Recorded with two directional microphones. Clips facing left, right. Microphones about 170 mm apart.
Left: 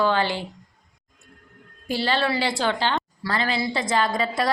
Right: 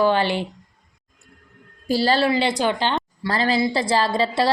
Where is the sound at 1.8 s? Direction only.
40° right (ahead or behind).